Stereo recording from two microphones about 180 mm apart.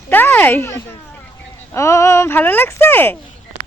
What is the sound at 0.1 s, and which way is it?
Speech, 10° left (ahead or behind).